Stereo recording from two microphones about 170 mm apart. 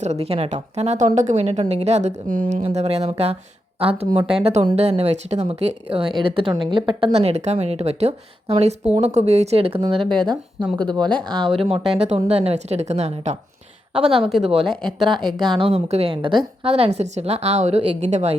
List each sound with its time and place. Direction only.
0.0 s a woman's voice: 40° right (ahead or behind)
10.0 s speech: 5° left (ahead or behind)
11.6 s a woman's voice: 35° right (ahead or behind)
14.6 s speech: 5° left (ahead or behind)
15.4 s a woman's voice: 30° right (ahead or behind)